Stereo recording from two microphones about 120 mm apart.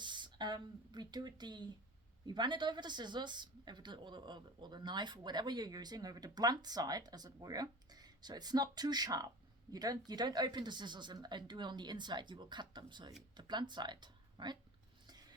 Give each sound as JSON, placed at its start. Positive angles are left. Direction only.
{"t": 0.0, "sound": "a woman's voice", "side_deg": -40}